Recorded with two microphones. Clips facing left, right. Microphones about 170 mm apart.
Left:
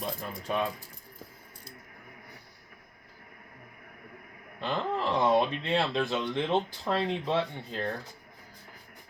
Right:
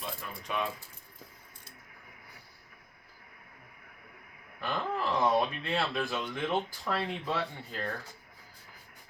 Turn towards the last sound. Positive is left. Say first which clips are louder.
# left 3 dB
turn(degrees=25)  # may be behind; listen again after turning